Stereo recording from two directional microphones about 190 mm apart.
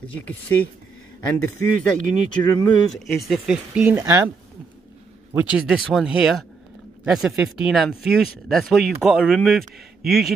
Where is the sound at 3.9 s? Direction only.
15° right (ahead or behind).